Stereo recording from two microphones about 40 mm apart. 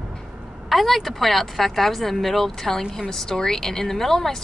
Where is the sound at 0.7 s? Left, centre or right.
Centre.